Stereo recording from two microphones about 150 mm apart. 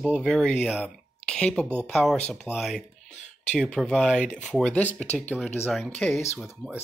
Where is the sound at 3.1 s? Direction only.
50° left (ahead or behind).